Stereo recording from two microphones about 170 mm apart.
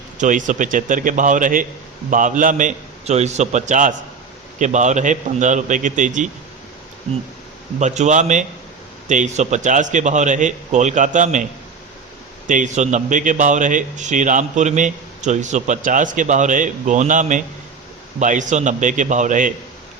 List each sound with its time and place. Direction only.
0.2 s a man's voice: 50° right (ahead or behind)
7.8 s a man's voice: 45° right (ahead or behind)
12.5 s a man's voice: 45° right (ahead or behind)